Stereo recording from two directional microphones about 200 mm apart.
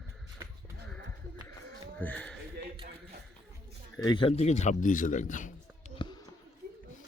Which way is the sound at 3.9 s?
20° left (ahead or behind).